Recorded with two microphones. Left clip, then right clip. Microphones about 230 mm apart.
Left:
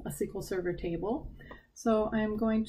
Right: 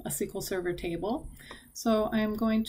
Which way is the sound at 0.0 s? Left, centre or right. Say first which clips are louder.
Right 2 dB; centre.